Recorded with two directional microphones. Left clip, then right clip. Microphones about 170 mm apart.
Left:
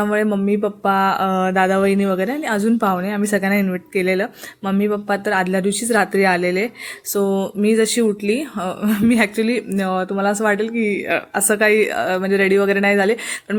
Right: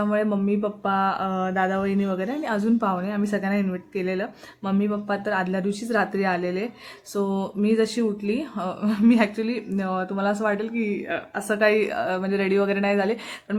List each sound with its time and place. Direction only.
0.0 s speech: 20° left (ahead or behind)